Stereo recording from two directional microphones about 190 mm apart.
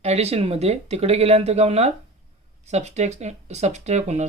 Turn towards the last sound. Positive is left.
turn(degrees=-35)  # may be behind; listen again after turning